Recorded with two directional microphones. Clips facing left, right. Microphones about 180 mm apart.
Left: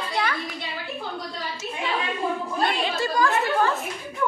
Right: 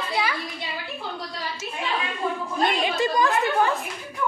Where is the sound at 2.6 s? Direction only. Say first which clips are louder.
Right 4 dB; 20° right (ahead or behind).